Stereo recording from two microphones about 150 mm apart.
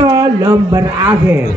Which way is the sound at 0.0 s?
20° right (ahead or behind).